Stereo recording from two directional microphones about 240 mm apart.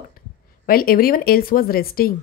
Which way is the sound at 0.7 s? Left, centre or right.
Left.